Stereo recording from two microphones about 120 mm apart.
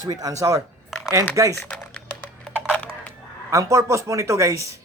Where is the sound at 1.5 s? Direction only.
20° left (ahead or behind).